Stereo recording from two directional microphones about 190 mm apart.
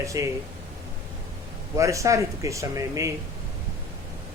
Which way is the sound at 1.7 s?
15° right (ahead or behind).